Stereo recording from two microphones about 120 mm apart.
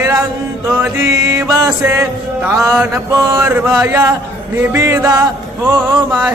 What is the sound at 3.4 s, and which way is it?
Mantra, 15° right (ahead or behind).